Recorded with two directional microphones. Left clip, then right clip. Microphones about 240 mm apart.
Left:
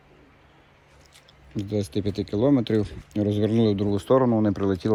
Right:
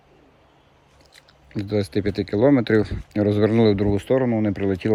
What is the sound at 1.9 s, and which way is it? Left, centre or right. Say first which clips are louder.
Speech: right 4 dB; right.